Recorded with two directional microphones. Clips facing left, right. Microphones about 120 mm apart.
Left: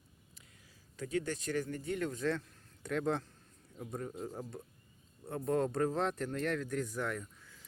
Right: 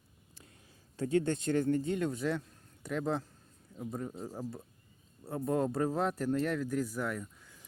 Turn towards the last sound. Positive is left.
turn(degrees=-5)  # may be behind; listen again after turning